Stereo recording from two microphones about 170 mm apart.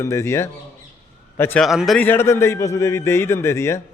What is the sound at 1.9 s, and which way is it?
Speech, 10° left (ahead or behind).